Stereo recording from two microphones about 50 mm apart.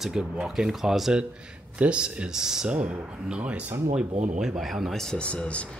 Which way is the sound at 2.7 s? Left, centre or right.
Right.